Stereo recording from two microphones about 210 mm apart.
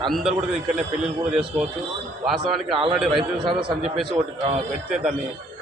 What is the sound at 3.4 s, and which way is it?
A man's voice, 25° right (ahead or behind).